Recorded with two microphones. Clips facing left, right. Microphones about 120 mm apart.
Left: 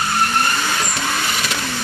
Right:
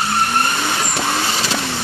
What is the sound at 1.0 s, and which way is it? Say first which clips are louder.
Vehicle: right 2 dB; 30° right (ahead or behind).